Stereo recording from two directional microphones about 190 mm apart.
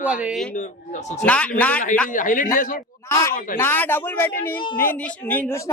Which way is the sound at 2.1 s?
45° left (ahead or behind).